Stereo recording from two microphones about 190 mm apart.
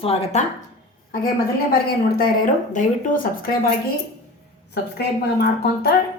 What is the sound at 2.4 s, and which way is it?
Speech, 40° left (ahead or behind).